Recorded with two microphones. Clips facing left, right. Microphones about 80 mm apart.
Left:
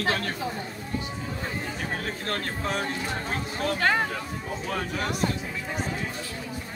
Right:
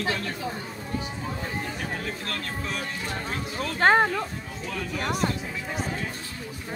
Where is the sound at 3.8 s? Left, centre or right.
Right.